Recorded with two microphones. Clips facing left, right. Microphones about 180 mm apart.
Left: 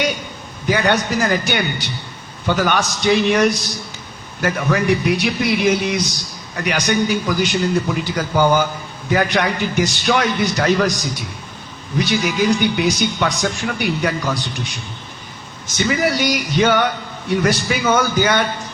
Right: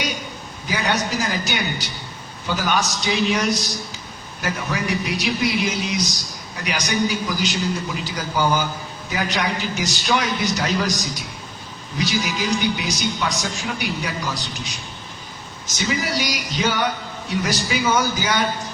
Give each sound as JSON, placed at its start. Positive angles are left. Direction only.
{"t": 0.7, "sound": "a man's voice", "side_deg": 55}
{"t": 15.8, "sound": "a man's voice", "side_deg": 55}